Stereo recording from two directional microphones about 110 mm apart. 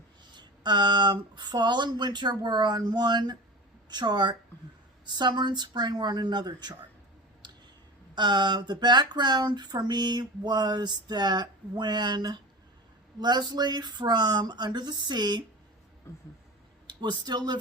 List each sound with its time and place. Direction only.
0.3 s speech: 45° right (ahead or behind)
7.4 s clicking: 40° right (ahead or behind)
8.1 s speech: 40° right (ahead or behind)
16.8 s speech: 40° right (ahead or behind)